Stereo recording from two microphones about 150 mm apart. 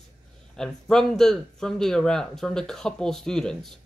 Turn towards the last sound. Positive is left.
turn(degrees=5)  # may be behind; listen again after turning